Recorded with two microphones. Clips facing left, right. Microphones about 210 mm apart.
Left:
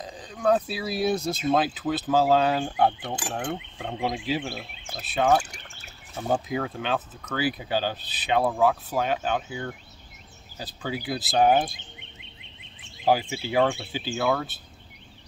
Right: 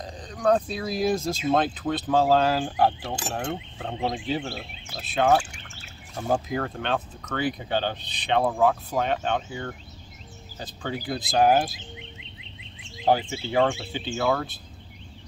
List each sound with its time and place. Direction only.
0.0 s speech: 5° left (ahead or behind)
5.4 s a sound: 40° left (ahead or behind)
6.1 s speech: centre (ahead or behind)
13.0 s speech: 5° left (ahead or behind)